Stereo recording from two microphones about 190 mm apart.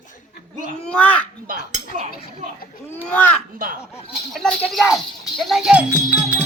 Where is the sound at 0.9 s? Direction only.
5° left (ahead or behind).